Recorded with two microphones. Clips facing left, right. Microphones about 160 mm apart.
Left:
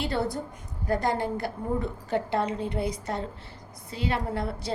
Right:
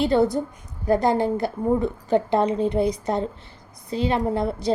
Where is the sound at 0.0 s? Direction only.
20° right (ahead or behind).